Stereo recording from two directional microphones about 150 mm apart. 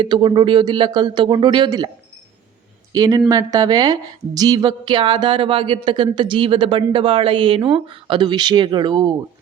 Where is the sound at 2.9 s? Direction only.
25° right (ahead or behind).